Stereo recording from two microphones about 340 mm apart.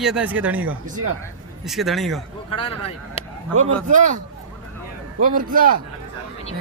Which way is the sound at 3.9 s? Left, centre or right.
Right.